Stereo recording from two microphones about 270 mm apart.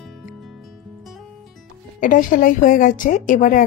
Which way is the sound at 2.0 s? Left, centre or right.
Left.